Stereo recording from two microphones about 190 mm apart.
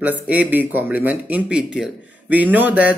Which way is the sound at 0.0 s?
10° right (ahead or behind).